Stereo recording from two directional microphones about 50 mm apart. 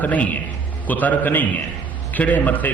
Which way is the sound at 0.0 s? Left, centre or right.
Left.